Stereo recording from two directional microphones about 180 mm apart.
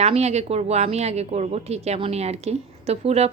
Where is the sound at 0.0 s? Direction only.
35° right (ahead or behind).